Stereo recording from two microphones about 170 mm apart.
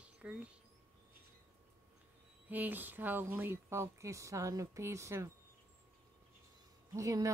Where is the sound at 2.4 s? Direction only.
10° right (ahead or behind).